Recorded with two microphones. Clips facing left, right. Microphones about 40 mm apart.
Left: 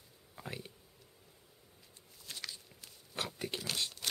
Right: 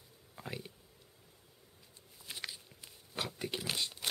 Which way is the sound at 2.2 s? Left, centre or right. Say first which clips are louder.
Right 2 dB; centre.